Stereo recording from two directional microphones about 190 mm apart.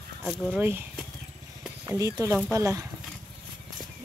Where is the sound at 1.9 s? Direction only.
15° right (ahead or behind).